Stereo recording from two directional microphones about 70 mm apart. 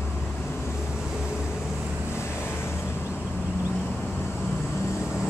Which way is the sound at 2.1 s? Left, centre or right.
Left.